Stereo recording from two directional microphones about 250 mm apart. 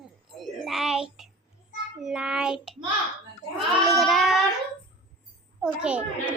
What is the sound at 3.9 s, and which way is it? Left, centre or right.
Child singing, centre.